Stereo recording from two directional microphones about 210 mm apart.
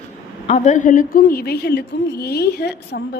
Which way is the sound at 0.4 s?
35° left (ahead or behind).